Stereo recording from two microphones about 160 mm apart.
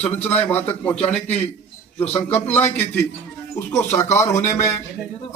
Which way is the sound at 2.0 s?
10° left (ahead or behind).